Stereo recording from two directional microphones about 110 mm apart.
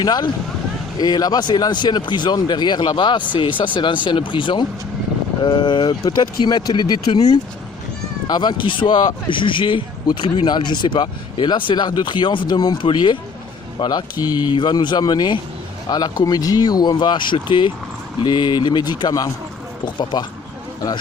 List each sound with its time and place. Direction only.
0.0 s speech: 40° left (ahead or behind)